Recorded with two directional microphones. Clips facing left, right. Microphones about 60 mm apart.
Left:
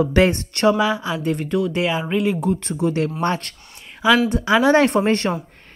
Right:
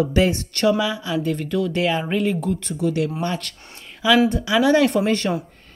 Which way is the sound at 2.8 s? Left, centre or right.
Left.